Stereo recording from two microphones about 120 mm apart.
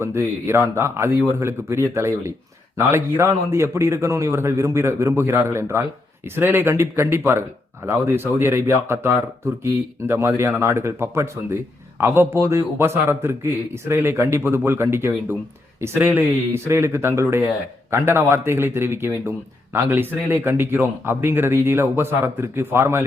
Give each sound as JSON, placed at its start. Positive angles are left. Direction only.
{"t": 0.0, "sound": "a man's voice", "side_deg": -20}